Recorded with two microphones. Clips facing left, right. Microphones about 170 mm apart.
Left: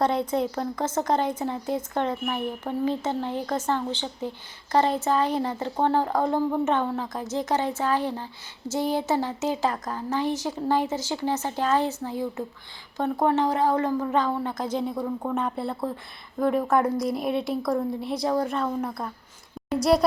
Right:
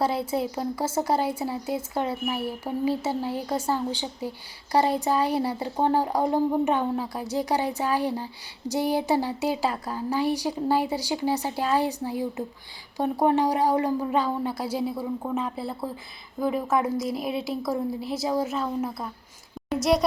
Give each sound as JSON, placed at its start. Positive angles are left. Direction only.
{"t": 0.0, "sound": "a woman's voice", "side_deg": -5}